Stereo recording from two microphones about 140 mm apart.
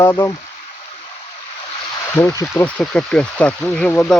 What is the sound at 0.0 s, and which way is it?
Speech, 20° left (ahead or behind).